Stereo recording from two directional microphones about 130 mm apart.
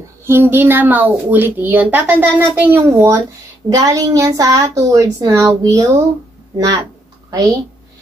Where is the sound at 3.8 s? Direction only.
30° right (ahead or behind).